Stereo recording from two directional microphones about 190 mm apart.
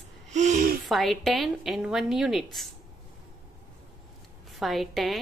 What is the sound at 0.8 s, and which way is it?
Speech, centre (ahead or behind).